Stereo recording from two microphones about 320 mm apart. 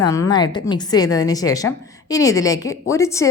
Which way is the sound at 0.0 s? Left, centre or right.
Centre.